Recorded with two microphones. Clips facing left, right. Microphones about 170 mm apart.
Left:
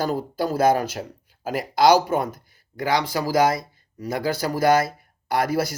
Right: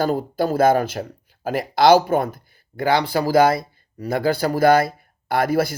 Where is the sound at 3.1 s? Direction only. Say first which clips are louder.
Right 5 dB; 60° right (ahead or behind).